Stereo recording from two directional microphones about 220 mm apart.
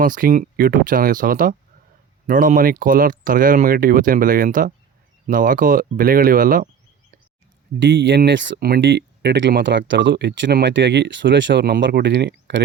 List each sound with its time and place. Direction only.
0.0 s speech: 40° right (ahead or behind)
7.8 s speech: 55° right (ahead or behind)